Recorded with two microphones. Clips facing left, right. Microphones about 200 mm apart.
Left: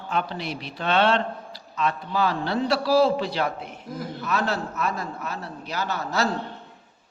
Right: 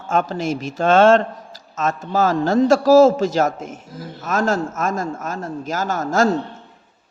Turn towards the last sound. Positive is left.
turn(degrees=-45)  # may be behind; listen again after turning